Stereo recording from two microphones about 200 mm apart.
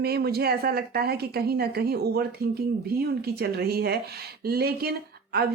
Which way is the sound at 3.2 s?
50° right (ahead or behind).